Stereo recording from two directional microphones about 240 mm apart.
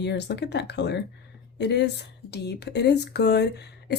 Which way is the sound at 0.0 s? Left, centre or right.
Left.